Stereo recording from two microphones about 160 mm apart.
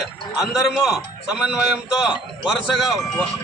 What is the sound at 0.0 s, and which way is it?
A man's voice, 5° right (ahead or behind).